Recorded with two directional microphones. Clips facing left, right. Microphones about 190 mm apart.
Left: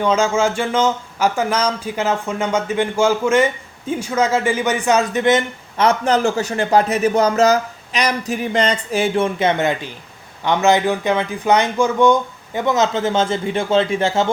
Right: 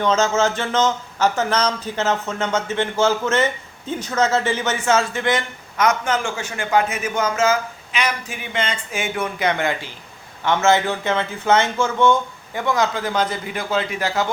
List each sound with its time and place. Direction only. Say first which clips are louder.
0.0 s a man's voice: left 2 dB; 10° left (ahead or behind); by 14.3 s 25° left (ahead or behind)